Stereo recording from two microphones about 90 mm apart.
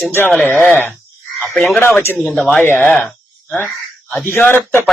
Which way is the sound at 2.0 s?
20° left (ahead or behind).